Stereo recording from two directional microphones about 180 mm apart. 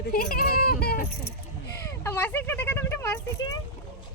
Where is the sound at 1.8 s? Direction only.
10° left (ahead or behind).